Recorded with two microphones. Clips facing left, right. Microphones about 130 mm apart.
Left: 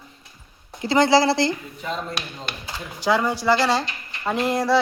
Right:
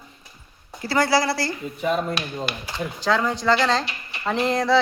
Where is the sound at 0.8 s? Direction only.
20° left (ahead or behind).